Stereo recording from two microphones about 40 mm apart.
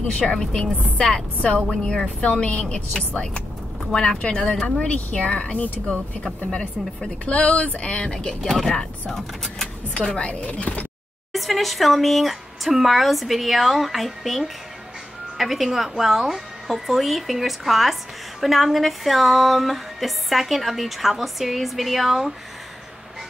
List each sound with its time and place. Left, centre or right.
0.0 s a woman's voice: left
2.1 s speech: left
3.9 s a woman's voice: centre
8.5 s speech: centre
9.9 s speech: left
10.3 s speech: left
11.3 s speech: centre